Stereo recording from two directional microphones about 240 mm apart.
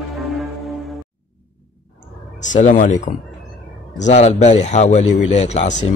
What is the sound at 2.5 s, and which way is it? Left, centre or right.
Speech, left.